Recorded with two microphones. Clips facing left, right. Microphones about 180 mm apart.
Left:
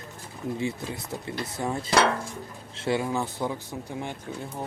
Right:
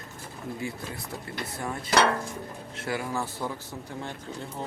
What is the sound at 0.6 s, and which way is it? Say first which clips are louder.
Speech: left 4 dB; 20° left (ahead or behind).